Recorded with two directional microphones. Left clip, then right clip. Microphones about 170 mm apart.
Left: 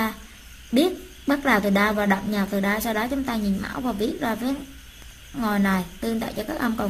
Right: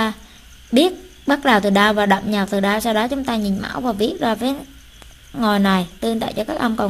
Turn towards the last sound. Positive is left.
turn(degrees=-30)  # may be behind; listen again after turning